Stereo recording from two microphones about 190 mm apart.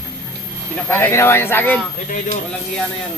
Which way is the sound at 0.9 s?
10° left (ahead or behind).